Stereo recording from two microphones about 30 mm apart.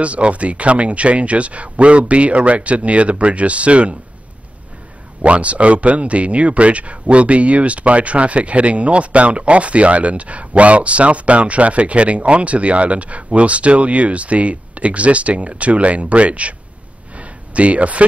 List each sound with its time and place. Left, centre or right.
0.0 s speech: right
5.2 s speech: right
17.1 s a sound: right